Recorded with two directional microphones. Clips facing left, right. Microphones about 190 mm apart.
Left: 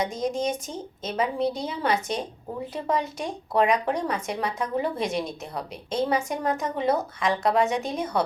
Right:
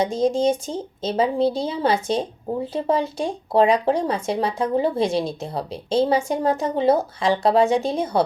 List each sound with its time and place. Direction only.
0.0 s speech: 30° right (ahead or behind)